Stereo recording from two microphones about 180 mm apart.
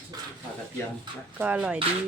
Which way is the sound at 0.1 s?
20° right (ahead or behind).